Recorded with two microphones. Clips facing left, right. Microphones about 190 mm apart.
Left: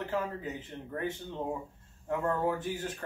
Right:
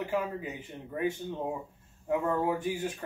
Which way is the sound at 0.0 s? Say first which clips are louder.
Right 2 dB; 10° right (ahead or behind).